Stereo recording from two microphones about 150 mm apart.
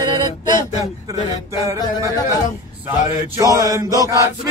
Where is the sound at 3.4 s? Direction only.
20° right (ahead or behind).